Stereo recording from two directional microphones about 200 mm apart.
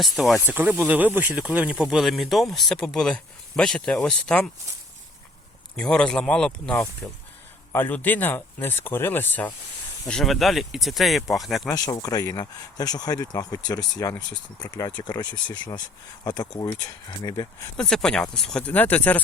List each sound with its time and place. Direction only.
0.0 s speech: centre (ahead or behind)
5.7 s speech: 5° left (ahead or behind)
11.7 s speech: 20° left (ahead or behind)
17.7 s speech: 5° left (ahead or behind)